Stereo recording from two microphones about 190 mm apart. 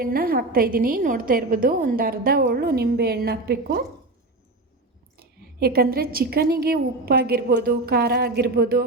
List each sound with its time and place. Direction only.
0.0 s a woman's voice: 50° right (ahead or behind)
5.1 s a woman's voice: 55° right (ahead or behind)